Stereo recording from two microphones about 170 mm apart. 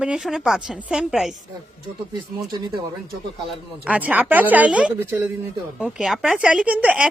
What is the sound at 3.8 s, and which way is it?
A woman's voice, 10° right (ahead or behind).